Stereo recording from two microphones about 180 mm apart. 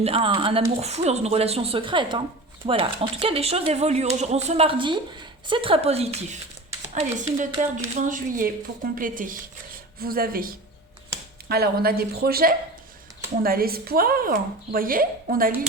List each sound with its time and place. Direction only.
0.0 s a woman's voice: 30° right (ahead or behind); by 15.5 s 55° right (ahead or behind)